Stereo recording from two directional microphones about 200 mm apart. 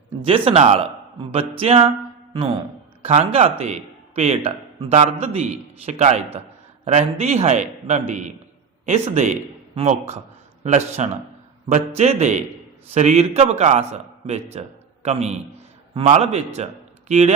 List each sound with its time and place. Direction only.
0.3 s a man's voice: 30° right (ahead or behind)